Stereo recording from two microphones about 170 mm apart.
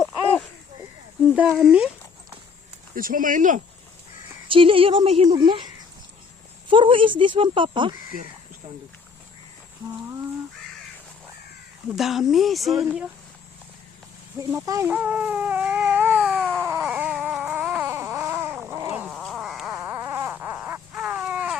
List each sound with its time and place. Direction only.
0.0 s a sound: 5° left (ahead or behind)
1.5 s speech: 5° right (ahead or behind)
2.9 s speech: 55° right (ahead or behind)
4.4 s speech: 30° right (ahead or behind)
11.9 s speech: centre (ahead or behind)
14.3 s baby cry: 20° right (ahead or behind); by 16.6 s centre (ahead or behind)
16.6 s a sound: 10° right (ahead or behind)
19.0 s cat: centre (ahead or behind)
19.8 s a sound: 15° right (ahead or behind)